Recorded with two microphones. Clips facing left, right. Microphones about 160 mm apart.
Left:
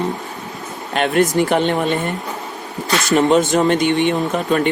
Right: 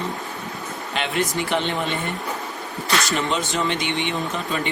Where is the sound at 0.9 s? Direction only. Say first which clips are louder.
Left 9 dB; 50° left (ahead or behind).